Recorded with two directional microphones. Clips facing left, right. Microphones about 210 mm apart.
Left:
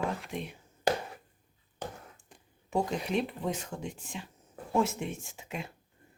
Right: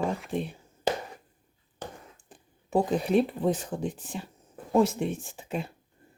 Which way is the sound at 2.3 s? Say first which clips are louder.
Right 5 dB; 35° right (ahead or behind).